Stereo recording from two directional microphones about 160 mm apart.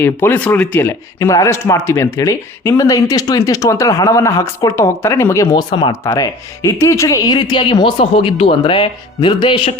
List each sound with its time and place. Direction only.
0.0 s speech: 15° left (ahead or behind); by 9.7 s 35° left (ahead or behind)